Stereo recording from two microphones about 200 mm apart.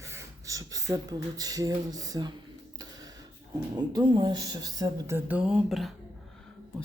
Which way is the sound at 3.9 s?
20° right (ahead or behind).